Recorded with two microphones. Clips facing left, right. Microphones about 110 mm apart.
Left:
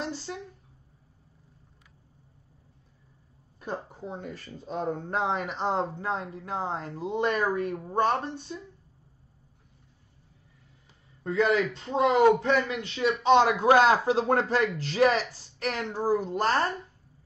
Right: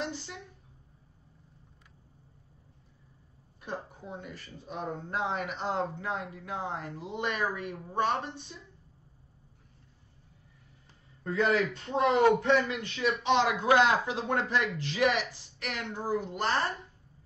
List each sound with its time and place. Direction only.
0.0 s a sound: 30° left (ahead or behind)
3.7 s speech: 30° left (ahead or behind)
11.7 s a man's voice: 25° left (ahead or behind)